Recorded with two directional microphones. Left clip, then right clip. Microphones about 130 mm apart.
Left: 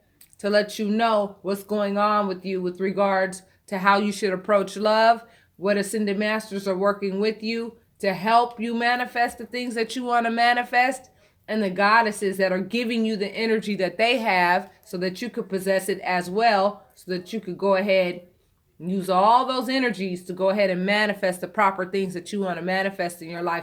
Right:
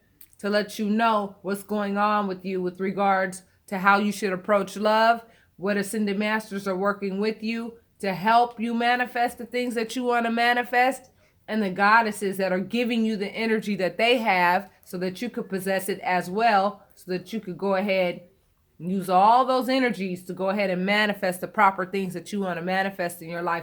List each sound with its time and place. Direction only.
0.4 s speech: 40° right (ahead or behind)